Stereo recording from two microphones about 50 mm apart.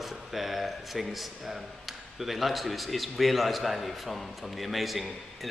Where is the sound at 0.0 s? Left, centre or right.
Centre.